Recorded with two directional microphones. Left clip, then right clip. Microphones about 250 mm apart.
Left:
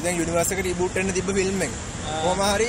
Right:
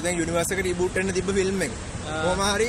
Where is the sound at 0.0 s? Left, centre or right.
Centre.